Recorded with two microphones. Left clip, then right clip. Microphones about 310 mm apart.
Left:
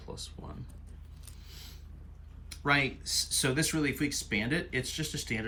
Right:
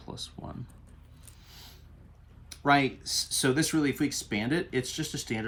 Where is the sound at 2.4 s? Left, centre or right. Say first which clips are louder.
Right 4 dB; centre.